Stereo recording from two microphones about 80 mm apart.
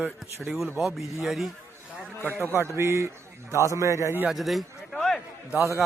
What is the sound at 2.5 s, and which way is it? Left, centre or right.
A man's voice, right.